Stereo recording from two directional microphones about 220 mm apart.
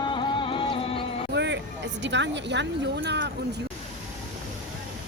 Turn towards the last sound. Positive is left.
turn(degrees=-50)  # may be behind; listen again after turning